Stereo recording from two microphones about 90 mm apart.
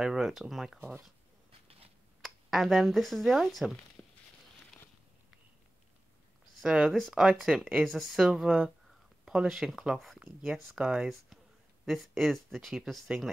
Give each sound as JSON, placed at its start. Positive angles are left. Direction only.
{"t": 0.0, "sound": "speech", "side_deg": -5}
{"t": 0.7, "sound": "speech", "side_deg": -15}
{"t": 2.2, "sound": "speech", "side_deg": -5}
{"t": 4.0, "sound": "a sound", "side_deg": 20}
{"t": 6.6, "sound": "speech", "side_deg": -10}
{"t": 7.0, "sound": "speech", "side_deg": 5}